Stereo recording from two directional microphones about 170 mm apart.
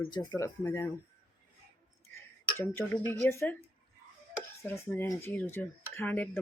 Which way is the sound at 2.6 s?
15° left (ahead or behind).